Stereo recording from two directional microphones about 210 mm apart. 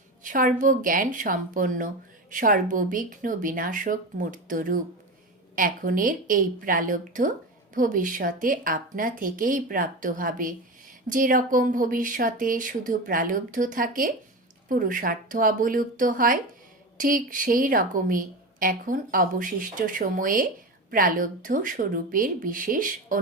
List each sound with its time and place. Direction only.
0.2 s speech: 40° right (ahead or behind)